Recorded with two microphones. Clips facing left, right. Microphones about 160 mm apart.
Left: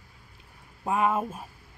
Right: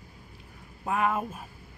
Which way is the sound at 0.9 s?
25° left (ahead or behind).